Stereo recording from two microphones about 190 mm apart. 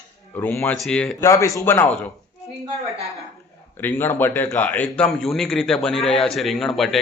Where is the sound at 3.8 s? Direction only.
10° left (ahead or behind).